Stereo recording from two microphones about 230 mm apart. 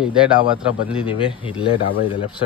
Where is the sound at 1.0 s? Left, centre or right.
Left.